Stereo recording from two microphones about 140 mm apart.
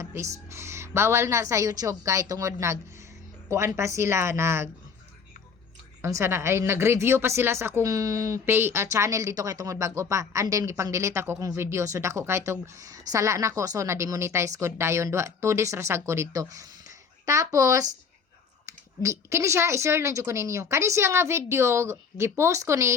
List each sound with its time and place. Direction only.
0.0 s speech: 20° right (ahead or behind)
6.0 s speech: 20° right (ahead or behind)